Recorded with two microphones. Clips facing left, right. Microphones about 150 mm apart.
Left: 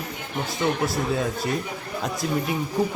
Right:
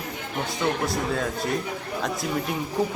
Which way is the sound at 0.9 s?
5° left (ahead or behind).